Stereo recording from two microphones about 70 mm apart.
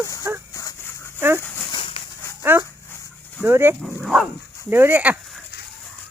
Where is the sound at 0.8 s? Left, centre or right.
Left.